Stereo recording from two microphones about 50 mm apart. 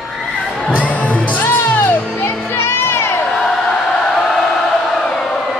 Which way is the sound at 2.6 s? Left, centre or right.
Left.